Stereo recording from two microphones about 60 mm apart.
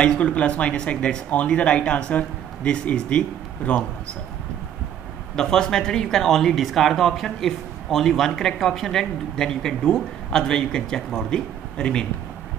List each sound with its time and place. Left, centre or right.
0.0 s speech: centre
5.3 s speech: centre
11.2 s speech: centre